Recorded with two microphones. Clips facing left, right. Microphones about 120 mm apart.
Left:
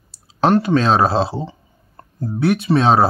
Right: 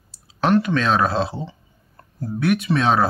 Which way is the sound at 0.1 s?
35° left (ahead or behind).